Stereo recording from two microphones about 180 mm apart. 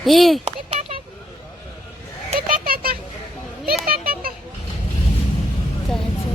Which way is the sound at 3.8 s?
55° right (ahead or behind).